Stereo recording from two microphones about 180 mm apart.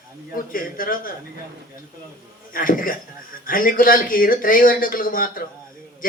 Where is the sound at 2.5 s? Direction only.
50° left (ahead or behind).